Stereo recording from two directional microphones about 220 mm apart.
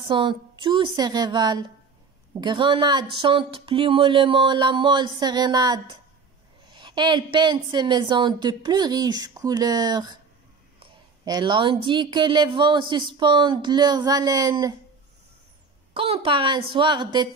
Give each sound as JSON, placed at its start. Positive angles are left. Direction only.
{"t": 0.1, "sound": "speech", "side_deg": -20}
{"t": 15.9, "sound": "speech", "side_deg": -25}